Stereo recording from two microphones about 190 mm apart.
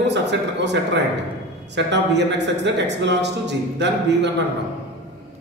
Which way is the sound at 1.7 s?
65° right (ahead or behind).